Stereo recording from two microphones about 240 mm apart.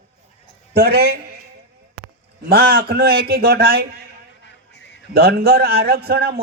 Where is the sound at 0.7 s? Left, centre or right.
Right.